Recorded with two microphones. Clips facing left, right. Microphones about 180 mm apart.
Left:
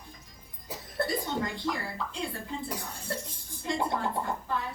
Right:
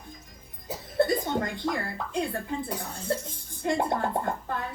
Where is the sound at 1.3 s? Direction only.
50° right (ahead or behind).